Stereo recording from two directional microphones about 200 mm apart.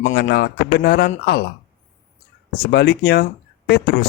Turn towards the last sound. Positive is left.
turn(degrees=50)  # may be behind; listen again after turning